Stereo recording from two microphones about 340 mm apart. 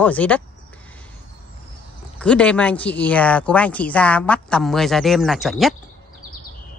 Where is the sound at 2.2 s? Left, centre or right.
Centre.